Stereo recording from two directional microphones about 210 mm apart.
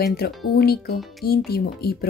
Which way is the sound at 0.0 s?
50° left (ahead or behind).